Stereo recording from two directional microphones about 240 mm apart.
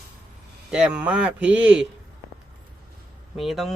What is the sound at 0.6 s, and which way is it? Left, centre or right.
Speech, centre.